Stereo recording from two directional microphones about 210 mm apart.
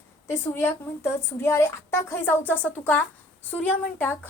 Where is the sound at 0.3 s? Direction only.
10° left (ahead or behind).